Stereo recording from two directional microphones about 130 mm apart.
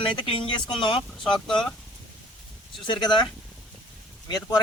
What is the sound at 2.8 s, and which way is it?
Speech, 35° left (ahead or behind).